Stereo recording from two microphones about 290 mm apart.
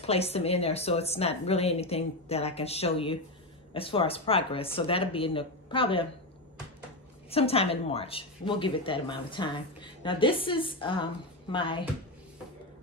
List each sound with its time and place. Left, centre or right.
0.0 s speech: left
7.2 s a woman's voice: centre